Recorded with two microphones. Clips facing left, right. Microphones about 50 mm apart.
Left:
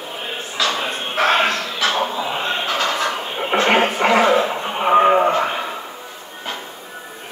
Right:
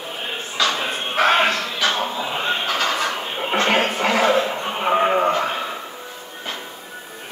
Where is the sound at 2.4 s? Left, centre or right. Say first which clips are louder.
Right 1 dB; centre.